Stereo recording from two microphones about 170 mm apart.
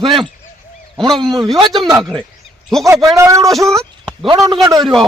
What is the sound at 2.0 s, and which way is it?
Speech, centre (ahead or behind).